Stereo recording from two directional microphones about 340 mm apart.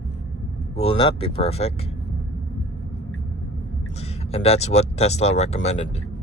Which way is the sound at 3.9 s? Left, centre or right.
Centre.